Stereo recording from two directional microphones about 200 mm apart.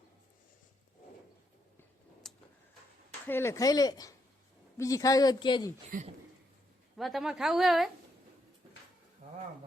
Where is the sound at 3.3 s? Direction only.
10° left (ahead or behind).